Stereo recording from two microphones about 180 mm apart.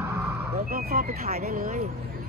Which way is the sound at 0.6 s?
55° right (ahead or behind).